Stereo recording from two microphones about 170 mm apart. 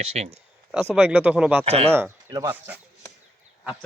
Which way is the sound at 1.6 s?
35° right (ahead or behind).